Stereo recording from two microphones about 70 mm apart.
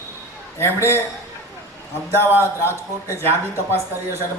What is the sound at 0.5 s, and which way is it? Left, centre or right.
Speech, left.